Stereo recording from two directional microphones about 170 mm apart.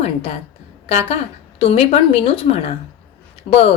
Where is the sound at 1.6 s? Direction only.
35° left (ahead or behind).